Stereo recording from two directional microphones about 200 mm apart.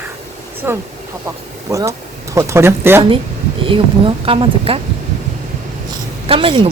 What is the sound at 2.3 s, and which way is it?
Speech, 15° right (ahead or behind).